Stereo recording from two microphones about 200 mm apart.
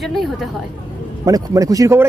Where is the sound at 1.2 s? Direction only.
15° right (ahead or behind).